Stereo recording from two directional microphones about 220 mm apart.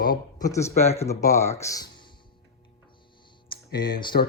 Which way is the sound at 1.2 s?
15° left (ahead or behind).